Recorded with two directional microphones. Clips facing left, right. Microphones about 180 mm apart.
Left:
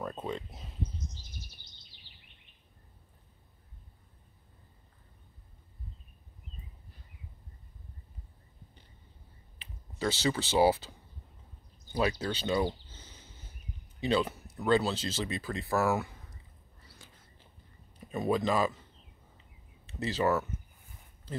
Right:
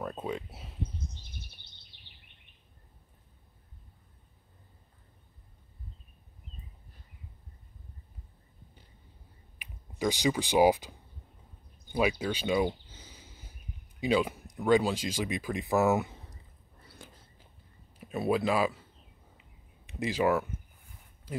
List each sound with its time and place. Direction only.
0.0 s a sound: 10° right (ahead or behind)
0.9 s a sound: 60° right (ahead or behind)
9.6 s speech: 15° right (ahead or behind)
17.0 s whispering: 60° right (ahead or behind)
17.9 s speech: 10° right (ahead or behind)
19.9 s speech: 10° right (ahead or behind)